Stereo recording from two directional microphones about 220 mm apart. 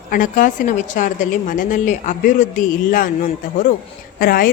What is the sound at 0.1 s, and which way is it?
Speech, 40° left (ahead or behind).